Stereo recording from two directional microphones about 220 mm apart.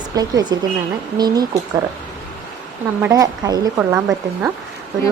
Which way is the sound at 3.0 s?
15° right (ahead or behind).